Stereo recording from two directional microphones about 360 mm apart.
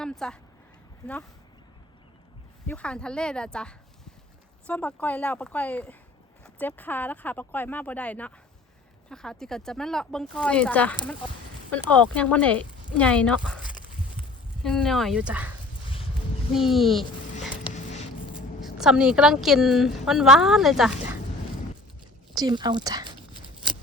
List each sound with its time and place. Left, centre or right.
0.0 s speech: centre
2.6 s speech: centre
14.6 s speech: centre
18.3 s speech: centre
22.4 s a sound: centre